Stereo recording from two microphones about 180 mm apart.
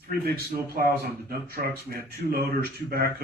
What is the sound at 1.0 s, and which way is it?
Speech, 55° right (ahead or behind).